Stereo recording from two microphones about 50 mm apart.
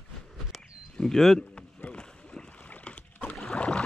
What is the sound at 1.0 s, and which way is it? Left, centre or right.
Speech, centre.